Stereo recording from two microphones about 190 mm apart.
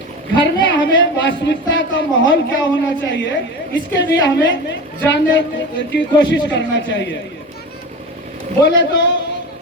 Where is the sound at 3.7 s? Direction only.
70° left (ahead or behind).